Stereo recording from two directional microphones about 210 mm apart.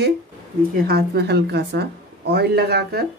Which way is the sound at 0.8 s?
50° right (ahead or behind).